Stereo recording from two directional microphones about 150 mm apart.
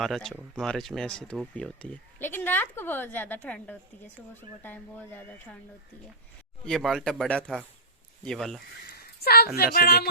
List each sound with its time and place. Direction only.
0.0 s speech: centre (ahead or behind)
6.7 s speech: centre (ahead or behind)
8.9 s a sound: 90° left
9.7 s speech: 90° left